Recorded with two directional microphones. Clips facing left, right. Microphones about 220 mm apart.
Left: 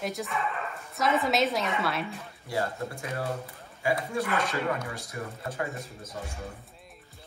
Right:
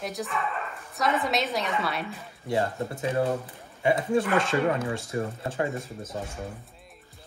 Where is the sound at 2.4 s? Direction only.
25° right (ahead or behind).